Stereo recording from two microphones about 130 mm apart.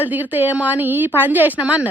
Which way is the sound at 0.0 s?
15° right (ahead or behind).